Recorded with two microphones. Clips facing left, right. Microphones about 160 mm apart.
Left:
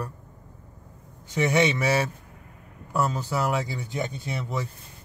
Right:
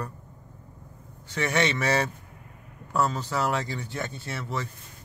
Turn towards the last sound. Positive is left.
turn(degrees=15)  # may be behind; listen again after turning